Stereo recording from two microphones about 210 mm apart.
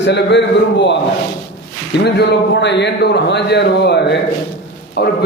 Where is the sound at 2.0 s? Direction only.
55° left (ahead or behind).